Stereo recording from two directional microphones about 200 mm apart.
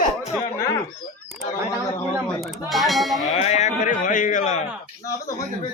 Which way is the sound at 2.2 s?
Centre (ahead or behind).